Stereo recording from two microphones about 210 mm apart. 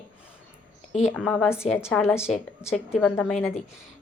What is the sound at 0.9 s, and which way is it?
Speech, 30° left (ahead or behind).